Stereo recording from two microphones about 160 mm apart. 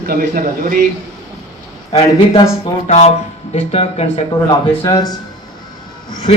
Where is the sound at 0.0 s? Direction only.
65° right (ahead or behind).